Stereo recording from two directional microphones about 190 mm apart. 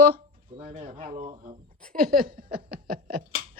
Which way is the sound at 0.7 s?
30° right (ahead or behind).